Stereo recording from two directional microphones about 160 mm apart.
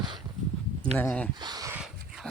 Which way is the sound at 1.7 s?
5° right (ahead or behind).